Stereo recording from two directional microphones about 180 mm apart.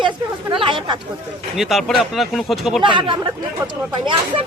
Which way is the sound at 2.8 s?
25° right (ahead or behind).